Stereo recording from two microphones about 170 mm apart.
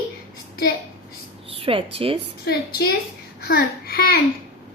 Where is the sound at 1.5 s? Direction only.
35° right (ahead or behind).